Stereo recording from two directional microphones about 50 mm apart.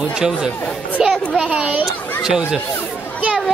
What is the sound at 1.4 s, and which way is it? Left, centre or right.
Speech, right.